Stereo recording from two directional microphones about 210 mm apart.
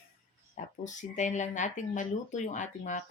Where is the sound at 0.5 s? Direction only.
35° left (ahead or behind).